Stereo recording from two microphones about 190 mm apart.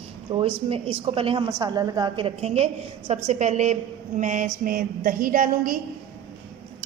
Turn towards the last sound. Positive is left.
turn(degrees=-45)  # may be behind; listen again after turning